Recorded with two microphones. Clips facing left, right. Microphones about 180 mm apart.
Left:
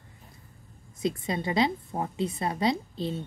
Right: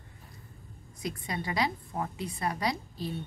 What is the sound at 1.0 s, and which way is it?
A woman's voice, 25° left (ahead or behind).